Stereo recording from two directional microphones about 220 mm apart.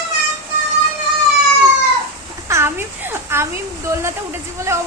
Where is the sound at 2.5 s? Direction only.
10° right (ahead or behind).